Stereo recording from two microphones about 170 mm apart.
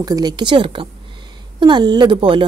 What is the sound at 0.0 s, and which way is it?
A woman's voice, 25° right (ahead or behind).